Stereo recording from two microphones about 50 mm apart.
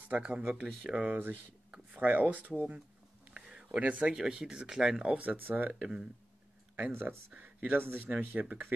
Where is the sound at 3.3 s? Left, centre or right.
Centre.